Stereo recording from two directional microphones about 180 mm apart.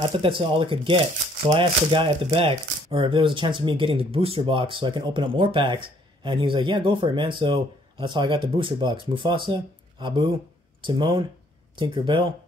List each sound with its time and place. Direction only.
0.2 s speech: 30° right (ahead or behind)